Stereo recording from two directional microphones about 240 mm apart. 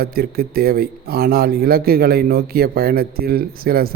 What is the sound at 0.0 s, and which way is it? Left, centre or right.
Speech, right.